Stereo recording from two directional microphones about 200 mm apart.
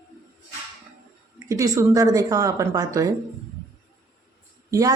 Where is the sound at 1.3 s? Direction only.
15° right (ahead or behind).